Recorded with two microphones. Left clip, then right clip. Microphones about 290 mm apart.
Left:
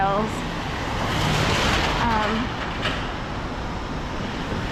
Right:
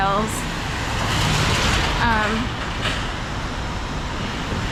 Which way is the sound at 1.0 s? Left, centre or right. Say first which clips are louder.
Right 2 dB; centre.